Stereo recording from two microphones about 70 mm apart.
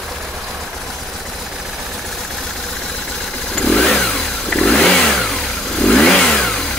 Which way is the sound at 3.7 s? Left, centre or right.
Centre.